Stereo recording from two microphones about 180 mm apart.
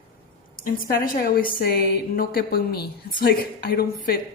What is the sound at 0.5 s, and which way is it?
A woman's voice, 55° left (ahead or behind).